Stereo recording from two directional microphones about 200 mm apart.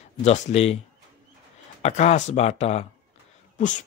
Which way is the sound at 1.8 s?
35° left (ahead or behind).